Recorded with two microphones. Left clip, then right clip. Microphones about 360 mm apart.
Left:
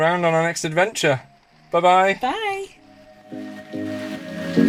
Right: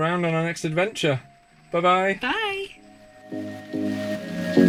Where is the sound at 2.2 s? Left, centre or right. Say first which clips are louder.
Left 2 dB; centre.